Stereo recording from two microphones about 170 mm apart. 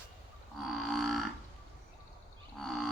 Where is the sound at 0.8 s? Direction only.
Centre (ahead or behind).